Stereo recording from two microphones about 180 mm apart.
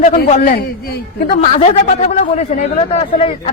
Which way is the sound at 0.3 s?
40° left (ahead or behind).